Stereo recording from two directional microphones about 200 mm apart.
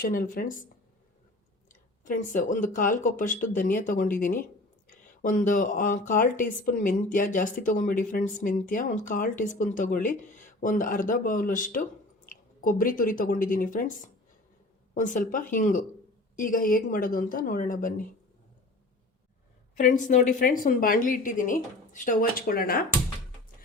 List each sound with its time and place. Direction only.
0.0 s speech: 45° left (ahead or behind)
2.0 s speech: 40° left (ahead or behind)
19.7 s speech: 40° left (ahead or behind)